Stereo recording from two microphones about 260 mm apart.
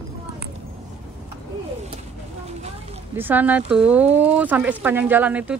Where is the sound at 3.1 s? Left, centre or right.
Centre.